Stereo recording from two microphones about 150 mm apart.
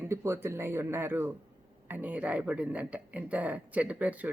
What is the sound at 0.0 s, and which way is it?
Speech, 20° right (ahead or behind).